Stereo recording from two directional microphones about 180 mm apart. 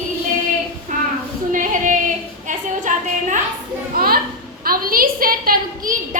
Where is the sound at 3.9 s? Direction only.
55° right (ahead or behind).